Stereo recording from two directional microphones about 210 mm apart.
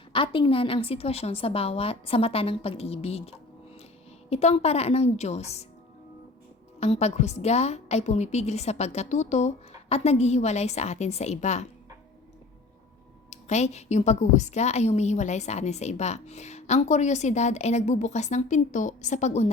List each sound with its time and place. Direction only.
0.1 s a woman's voice: 25° left (ahead or behind)
6.7 s a woman's voice: 30° left (ahead or behind)
13.3 s a woman's voice: 30° left (ahead or behind)